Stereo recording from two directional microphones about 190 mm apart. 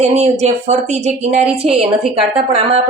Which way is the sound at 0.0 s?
35° right (ahead or behind).